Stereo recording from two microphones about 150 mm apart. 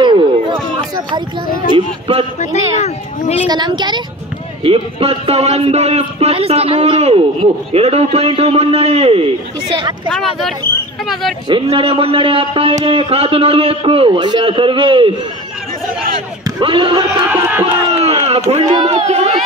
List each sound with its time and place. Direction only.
0.0 s a sound: 30° right (ahead or behind)
2.5 s a sound: 45° left (ahead or behind)
3.4 s a woman's voice: 30° right (ahead or behind)
4.6 s a man's voice: 40° right (ahead or behind)
10.1 s speech: centre (ahead or behind)
11.4 s a man's voice: 35° right (ahead or behind)
16.4 s speech: 30° right (ahead or behind)
17.3 s speech: 15° right (ahead or behind)
17.8 s a man's voice: 45° right (ahead or behind)